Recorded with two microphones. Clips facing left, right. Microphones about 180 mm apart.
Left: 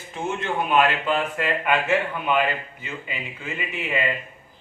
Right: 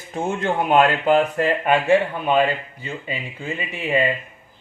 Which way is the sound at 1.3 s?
35° right (ahead or behind).